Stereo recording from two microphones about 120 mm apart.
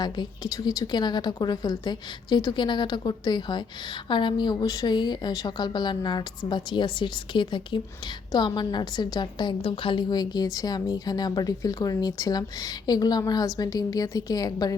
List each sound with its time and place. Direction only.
0.0 s a woman's voice: 35° left (ahead or behind)